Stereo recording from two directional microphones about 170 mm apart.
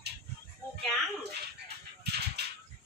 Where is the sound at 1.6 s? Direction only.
75° right (ahead or behind).